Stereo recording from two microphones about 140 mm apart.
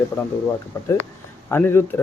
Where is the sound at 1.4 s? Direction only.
15° left (ahead or behind).